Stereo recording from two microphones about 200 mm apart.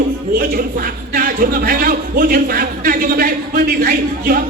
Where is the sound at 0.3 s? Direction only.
45° right (ahead or behind).